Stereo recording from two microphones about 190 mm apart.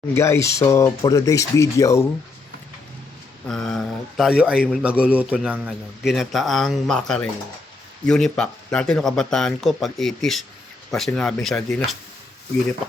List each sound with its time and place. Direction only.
0.1 s speech: 15° left (ahead or behind)
3.4 s a man's voice: 5° left (ahead or behind)